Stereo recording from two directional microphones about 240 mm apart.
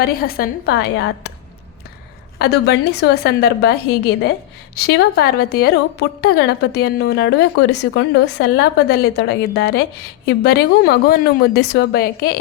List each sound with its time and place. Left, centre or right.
0.0 s a woman's voice: left
2.4 s a woman's voice: left